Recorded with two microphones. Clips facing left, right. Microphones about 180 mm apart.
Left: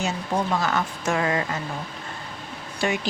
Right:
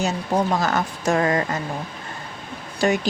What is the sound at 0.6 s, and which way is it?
Speech, 40° right (ahead or behind).